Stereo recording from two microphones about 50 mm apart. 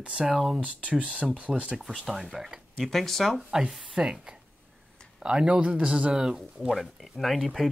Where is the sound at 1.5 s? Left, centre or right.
Centre.